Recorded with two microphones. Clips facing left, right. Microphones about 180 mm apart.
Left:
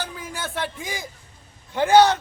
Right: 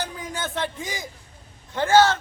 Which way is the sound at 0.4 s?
20° right (ahead or behind).